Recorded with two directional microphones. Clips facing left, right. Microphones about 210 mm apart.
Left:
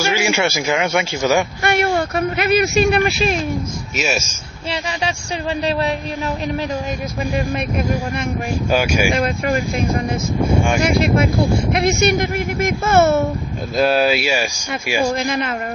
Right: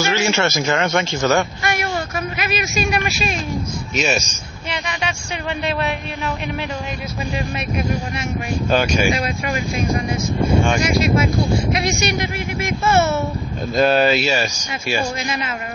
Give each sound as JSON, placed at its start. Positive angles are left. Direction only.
{"t": 0.0, "sound": "speech", "side_deg": 10}
{"t": 1.6, "sound": "a sound", "side_deg": 60}
{"t": 2.7, "sound": "speech", "side_deg": 60}
{"t": 3.9, "sound": "a man's voice", "side_deg": 5}
{"t": 4.6, "sound": "speech", "side_deg": 30}
{"t": 8.6, "sound": "speech", "side_deg": 10}
{"t": 9.1, "sound": "speech", "side_deg": 50}
{"t": 10.8, "sound": "speech", "side_deg": 55}
{"t": 13.7, "sound": "speech", "side_deg": 5}
{"t": 15.1, "sound": "speech", "side_deg": 55}